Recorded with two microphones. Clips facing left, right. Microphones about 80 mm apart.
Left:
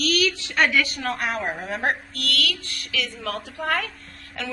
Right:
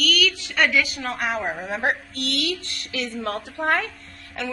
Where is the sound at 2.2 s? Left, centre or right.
Right.